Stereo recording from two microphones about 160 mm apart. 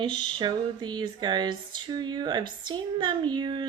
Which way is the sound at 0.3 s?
25° right (ahead or behind).